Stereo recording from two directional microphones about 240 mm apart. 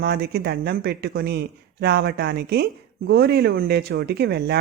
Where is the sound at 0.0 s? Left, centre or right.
Right.